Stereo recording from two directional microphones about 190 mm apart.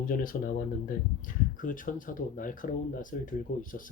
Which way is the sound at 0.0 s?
45° left (ahead or behind).